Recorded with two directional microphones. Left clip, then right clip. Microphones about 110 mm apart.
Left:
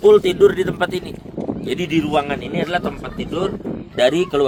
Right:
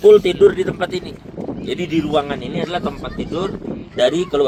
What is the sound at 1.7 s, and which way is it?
Speech, 55° left (ahead or behind).